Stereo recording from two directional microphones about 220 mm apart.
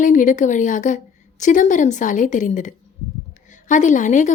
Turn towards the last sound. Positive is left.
turn(degrees=35)  # may be behind; listen again after turning